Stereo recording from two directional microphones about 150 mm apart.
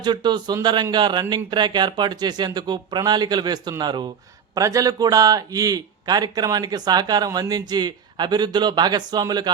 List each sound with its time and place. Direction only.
0.0 s a man's voice: 30° right (ahead or behind)